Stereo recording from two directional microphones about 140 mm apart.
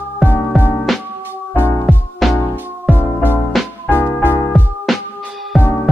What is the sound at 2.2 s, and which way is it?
Music, centre (ahead or behind).